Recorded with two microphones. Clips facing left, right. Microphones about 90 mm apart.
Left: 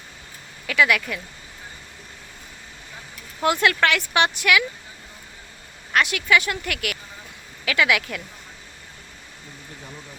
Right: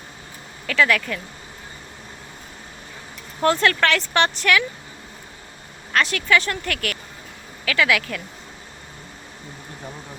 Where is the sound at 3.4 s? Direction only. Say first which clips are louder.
Right 1 dB; 15° left (ahead or behind).